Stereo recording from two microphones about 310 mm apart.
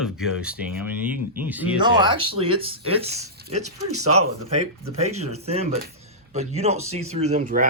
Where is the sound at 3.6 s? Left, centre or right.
Right.